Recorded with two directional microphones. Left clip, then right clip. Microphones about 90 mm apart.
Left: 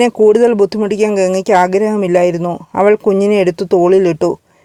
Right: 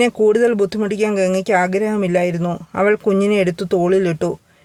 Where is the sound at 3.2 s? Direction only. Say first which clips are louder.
Left 5 dB; 40° left (ahead or behind).